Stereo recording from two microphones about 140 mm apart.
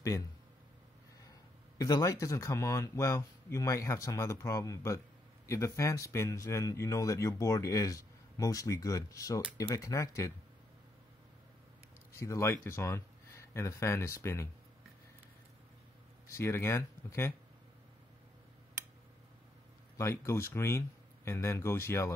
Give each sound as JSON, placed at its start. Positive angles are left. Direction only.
{"t": 1.8, "sound": "speech", "side_deg": 25}
{"t": 12.1, "sound": "speech", "side_deg": 20}
{"t": 16.3, "sound": "speech", "side_deg": 20}
{"t": 20.0, "sound": "speech", "side_deg": 20}